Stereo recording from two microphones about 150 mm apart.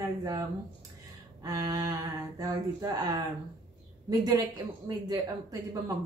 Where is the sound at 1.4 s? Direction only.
25° right (ahead or behind).